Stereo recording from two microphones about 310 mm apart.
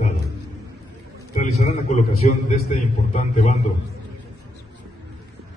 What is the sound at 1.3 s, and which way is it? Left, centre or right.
A man's voice, left.